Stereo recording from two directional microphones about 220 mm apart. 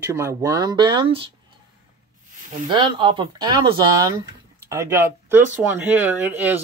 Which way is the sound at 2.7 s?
20° right (ahead or behind).